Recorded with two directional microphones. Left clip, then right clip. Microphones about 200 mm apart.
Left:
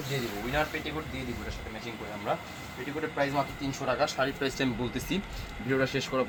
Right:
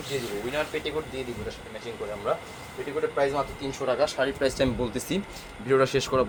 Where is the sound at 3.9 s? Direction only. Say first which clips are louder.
Right 3 dB; 55° right (ahead or behind); by 6.3 s 70° right (ahead or behind).